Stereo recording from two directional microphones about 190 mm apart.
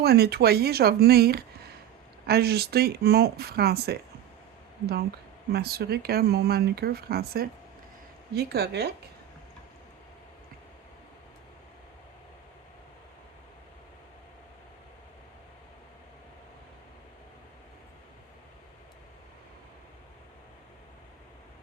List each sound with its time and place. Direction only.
0.0 s speech: 55° right (ahead or behind)
5.5 s speech: 55° right (ahead or behind)